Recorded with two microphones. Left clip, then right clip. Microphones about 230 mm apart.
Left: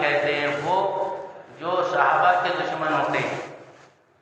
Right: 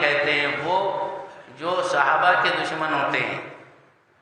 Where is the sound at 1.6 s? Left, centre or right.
Right.